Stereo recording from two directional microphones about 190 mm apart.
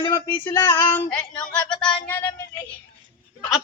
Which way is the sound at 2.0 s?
10° left (ahead or behind).